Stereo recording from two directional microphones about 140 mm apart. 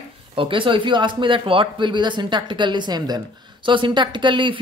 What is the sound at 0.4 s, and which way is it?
Speech, 35° right (ahead or behind).